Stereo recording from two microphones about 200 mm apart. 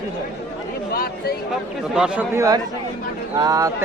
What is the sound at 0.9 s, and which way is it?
Speech, 50° left (ahead or behind).